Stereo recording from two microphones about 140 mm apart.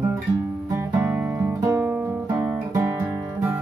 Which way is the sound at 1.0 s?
15° right (ahead or behind).